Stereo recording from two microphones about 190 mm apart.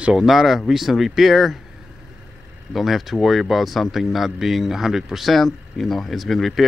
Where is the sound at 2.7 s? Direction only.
Centre (ahead or behind).